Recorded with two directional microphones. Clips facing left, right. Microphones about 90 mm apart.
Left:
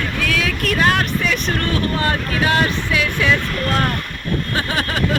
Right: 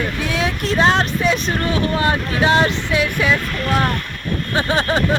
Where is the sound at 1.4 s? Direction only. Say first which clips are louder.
Right 1 dB; 20° right (ahead or behind).